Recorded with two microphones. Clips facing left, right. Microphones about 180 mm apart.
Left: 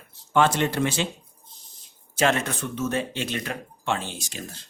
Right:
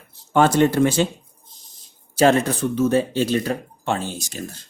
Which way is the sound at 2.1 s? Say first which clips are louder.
Right 7 dB; 35° right (ahead or behind).